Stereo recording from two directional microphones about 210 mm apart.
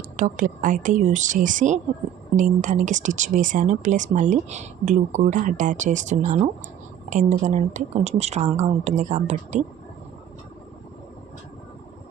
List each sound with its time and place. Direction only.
0.2 s speech: 40° right (ahead or behind)